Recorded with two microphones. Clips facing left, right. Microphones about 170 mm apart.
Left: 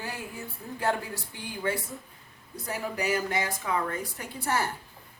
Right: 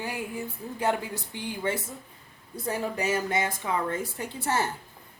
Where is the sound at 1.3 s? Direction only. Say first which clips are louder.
Right 5 dB; 20° right (ahead or behind).